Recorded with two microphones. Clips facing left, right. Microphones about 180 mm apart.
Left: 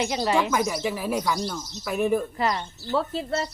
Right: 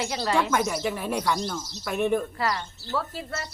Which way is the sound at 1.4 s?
15° left (ahead or behind).